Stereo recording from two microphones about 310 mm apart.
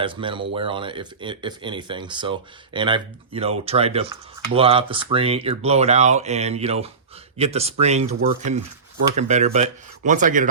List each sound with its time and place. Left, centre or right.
0.0 s speech: centre